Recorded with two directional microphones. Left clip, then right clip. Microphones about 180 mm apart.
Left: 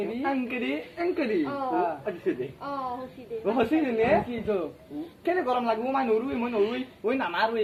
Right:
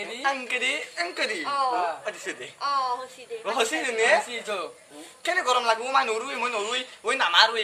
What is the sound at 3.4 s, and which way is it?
Speech, 15° right (ahead or behind).